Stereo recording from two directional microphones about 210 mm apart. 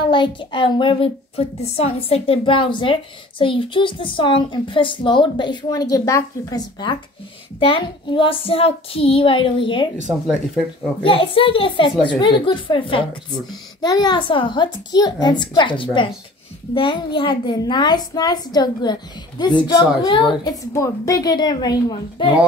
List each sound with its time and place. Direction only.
0.1 s a child's voice: 20° left (ahead or behind)
10.0 s speech: centre (ahead or behind)
11.0 s a child's voice: 25° left (ahead or behind)